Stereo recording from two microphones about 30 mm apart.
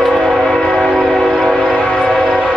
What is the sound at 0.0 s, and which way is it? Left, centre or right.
Train, centre.